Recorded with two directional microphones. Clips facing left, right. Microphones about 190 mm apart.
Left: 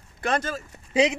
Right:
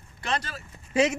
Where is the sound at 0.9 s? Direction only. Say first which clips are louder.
Left 2 dB; 15° left (ahead or behind).